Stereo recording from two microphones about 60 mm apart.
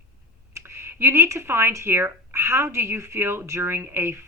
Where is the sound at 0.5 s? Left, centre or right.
Right.